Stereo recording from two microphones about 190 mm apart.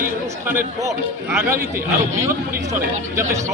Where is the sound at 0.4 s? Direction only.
15° right (ahead or behind).